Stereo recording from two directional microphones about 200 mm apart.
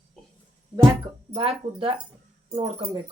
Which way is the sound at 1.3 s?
30° right (ahead or behind).